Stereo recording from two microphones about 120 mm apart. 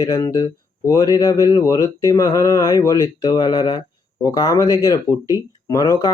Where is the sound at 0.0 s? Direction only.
30° left (ahead or behind).